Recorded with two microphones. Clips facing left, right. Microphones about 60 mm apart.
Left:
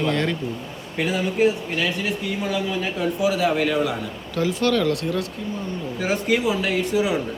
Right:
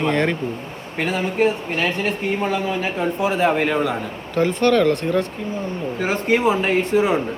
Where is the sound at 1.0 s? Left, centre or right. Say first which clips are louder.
Right 1 dB; right.